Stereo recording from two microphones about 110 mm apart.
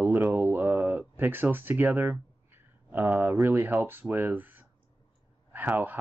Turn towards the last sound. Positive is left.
turn(degrees=-15)  # may be behind; listen again after turning